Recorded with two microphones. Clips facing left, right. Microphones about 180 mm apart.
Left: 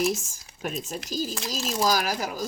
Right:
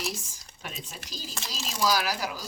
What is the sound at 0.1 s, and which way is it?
Speech, 45° left (ahead or behind).